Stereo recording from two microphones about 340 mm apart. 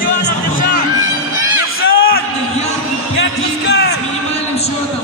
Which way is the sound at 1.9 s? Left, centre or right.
Left.